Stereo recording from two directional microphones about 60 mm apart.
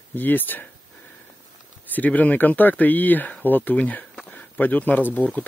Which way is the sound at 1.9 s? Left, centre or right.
Left.